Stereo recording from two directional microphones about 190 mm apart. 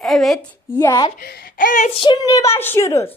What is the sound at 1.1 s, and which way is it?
Speech, 50° left (ahead or behind).